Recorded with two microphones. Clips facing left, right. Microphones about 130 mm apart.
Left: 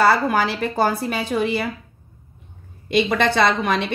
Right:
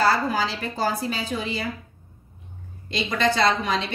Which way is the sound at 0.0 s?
60° left (ahead or behind).